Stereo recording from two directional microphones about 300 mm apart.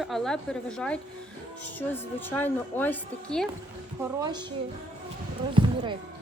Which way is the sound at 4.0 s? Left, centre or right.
Centre.